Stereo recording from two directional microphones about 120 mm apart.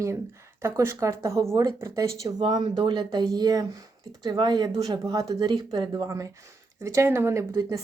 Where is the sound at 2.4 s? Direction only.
40° right (ahead or behind).